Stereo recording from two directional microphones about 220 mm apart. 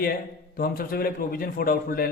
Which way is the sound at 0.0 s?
45° left (ahead or behind).